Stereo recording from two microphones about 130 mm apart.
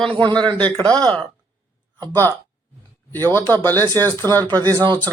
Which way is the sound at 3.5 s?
15° left (ahead or behind).